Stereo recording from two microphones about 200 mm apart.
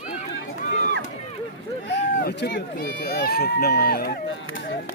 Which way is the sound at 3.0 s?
50° left (ahead or behind).